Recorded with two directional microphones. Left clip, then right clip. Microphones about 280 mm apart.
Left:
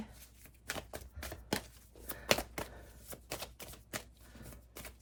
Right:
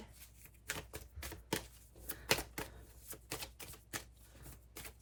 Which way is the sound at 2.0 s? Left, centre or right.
Centre.